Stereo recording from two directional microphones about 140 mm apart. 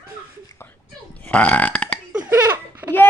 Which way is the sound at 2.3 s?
15° right (ahead or behind).